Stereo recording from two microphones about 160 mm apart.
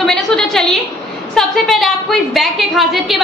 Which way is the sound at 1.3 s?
Centre (ahead or behind).